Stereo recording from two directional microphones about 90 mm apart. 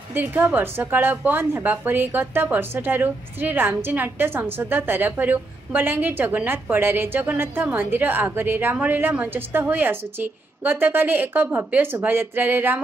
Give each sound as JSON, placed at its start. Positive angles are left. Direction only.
{"t": 0.1, "sound": "a woman's voice", "side_deg": -20}